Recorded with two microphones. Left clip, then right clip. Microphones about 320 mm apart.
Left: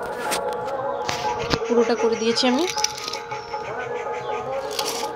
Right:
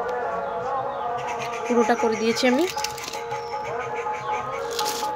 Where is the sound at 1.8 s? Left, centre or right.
Centre.